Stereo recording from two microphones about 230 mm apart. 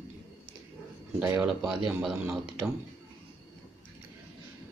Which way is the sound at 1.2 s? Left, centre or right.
Centre.